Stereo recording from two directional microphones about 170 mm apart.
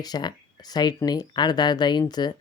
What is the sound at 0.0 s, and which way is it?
Speech, 25° left (ahead or behind).